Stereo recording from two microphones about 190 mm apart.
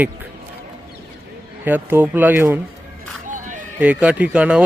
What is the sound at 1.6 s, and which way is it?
Speech, 10° right (ahead or behind).